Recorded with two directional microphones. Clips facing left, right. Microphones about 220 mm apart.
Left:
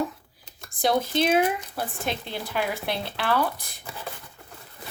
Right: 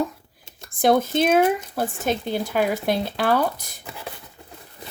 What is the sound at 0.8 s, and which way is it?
Speech, 50° right (ahead or behind).